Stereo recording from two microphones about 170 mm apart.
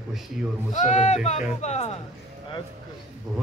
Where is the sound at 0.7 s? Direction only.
45° left (ahead or behind).